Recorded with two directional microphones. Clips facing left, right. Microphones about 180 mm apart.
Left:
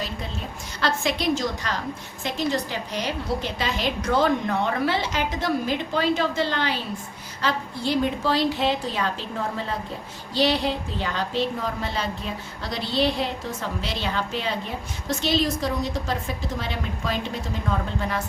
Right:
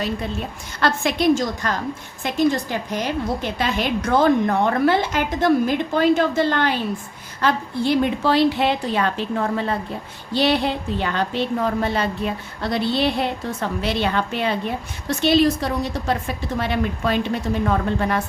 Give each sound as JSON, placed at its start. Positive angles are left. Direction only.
{"t": 0.8, "sound": "a woman's voice", "side_deg": -55}